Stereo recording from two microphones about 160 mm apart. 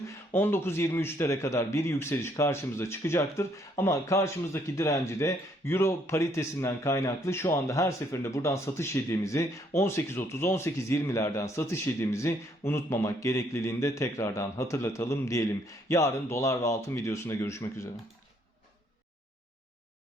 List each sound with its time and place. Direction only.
0.3 s speech: 15° left (ahead or behind)